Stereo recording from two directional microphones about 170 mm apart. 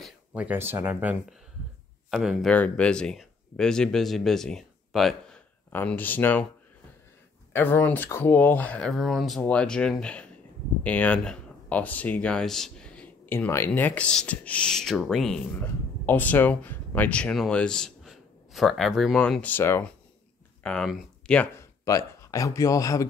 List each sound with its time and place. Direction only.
0.0 s speech: 5° right (ahead or behind)
2.0 s speech: centre (ahead or behind)
7.5 s speech: 10° left (ahead or behind)
21.8 s speech: 20° left (ahead or behind)